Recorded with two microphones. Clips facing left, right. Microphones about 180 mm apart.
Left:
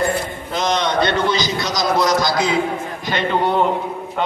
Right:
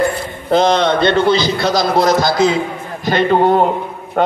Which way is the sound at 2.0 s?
55° right (ahead or behind).